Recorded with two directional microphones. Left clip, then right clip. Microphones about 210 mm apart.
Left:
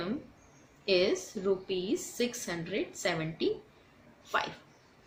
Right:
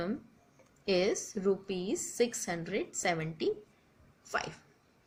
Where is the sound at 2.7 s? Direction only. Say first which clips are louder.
Left 1 dB; 30° left (ahead or behind).